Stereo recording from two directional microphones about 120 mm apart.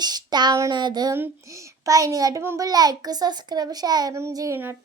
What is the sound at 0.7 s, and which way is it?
Speech, 35° right (ahead or behind).